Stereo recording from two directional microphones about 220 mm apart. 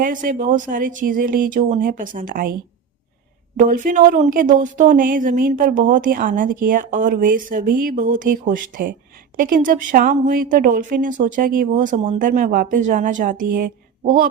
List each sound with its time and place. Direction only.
0.0 s a woman's voice: 40° right (ahead or behind)
3.6 s a woman's voice: 40° right (ahead or behind)